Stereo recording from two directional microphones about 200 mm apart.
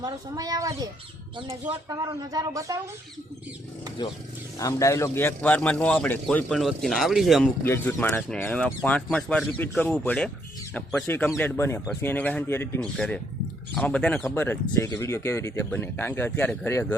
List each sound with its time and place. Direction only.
0.0 s speech: 20° right (ahead or behind)
4.0 s a man's voice: 20° left (ahead or behind); by 7.5 s centre (ahead or behind)
7.6 s speech: 10° left (ahead or behind)